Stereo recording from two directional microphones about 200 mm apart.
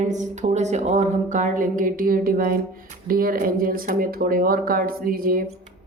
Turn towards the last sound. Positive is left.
turn(degrees=-45)  # may be behind; listen again after turning